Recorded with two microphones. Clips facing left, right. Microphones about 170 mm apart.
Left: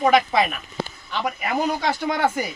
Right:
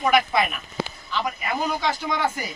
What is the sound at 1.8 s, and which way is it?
Speech, 50° left (ahead or behind).